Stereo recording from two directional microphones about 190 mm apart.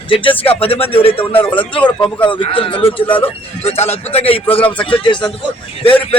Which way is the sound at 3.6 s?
35° left (ahead or behind).